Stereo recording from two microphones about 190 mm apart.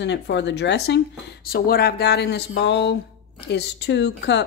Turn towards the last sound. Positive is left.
turn(degrees=65)  # may be behind; listen again after turning